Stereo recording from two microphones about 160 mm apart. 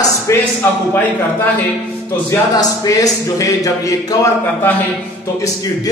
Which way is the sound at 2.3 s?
20° left (ahead or behind).